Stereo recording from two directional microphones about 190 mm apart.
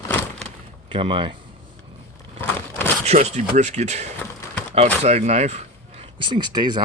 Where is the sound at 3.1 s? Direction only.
35° right (ahead or behind).